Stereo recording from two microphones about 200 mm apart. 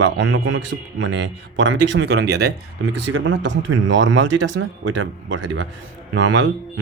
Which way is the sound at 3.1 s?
70° right (ahead or behind).